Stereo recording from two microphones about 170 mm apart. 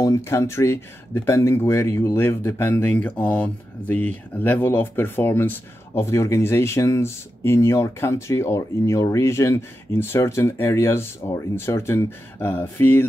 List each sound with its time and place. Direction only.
0.0 s speech: 15° left (ahead or behind)